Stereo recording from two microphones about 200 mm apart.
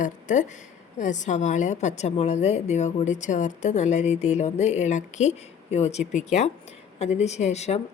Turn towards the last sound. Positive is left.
turn(degrees=35)  # may be behind; listen again after turning